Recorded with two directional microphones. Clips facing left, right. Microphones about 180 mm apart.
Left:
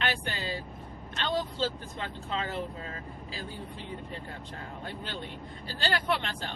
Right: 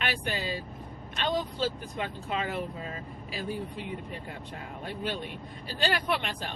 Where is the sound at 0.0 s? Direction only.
15° right (ahead or behind).